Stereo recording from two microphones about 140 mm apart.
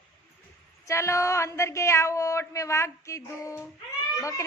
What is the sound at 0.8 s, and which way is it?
Speech, 20° left (ahead or behind).